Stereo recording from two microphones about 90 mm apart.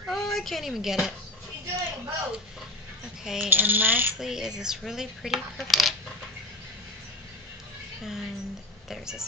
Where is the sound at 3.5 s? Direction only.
20° right (ahead or behind).